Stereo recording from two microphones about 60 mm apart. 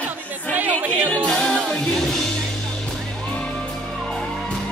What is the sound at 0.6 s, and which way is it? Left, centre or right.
Music, right.